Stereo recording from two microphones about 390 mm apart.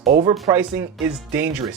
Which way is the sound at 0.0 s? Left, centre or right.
Centre.